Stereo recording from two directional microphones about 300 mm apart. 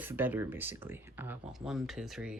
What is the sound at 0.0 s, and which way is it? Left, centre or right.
Speech, centre.